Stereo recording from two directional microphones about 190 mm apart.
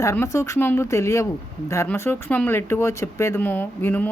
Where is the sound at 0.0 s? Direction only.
15° left (ahead or behind).